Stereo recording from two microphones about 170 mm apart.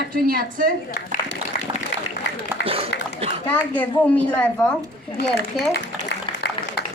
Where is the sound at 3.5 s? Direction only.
10° left (ahead or behind).